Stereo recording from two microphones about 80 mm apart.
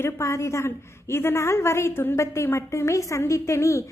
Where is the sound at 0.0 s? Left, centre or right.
Left.